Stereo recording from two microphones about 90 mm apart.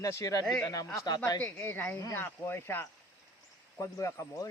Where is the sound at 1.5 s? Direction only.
20° left (ahead or behind).